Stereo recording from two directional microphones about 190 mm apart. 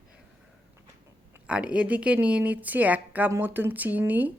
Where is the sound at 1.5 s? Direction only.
5° right (ahead or behind).